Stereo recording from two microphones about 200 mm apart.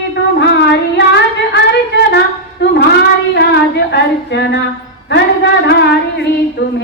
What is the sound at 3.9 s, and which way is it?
Speech, 60° left (ahead or behind).